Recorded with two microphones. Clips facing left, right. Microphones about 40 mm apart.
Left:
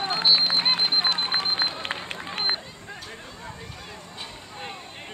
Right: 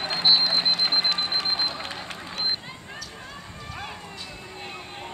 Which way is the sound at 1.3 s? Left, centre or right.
Left.